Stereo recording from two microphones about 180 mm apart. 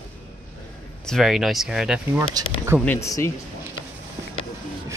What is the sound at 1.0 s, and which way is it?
Speech, centre (ahead or behind).